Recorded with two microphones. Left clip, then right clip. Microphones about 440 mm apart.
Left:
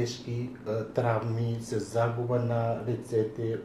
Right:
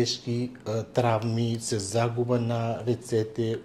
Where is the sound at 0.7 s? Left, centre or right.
Right.